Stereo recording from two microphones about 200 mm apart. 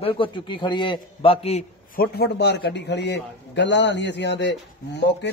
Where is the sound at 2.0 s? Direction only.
55° left (ahead or behind).